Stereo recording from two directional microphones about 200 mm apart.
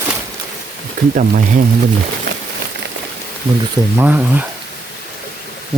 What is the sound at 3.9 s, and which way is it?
Speech, 10° right (ahead or behind).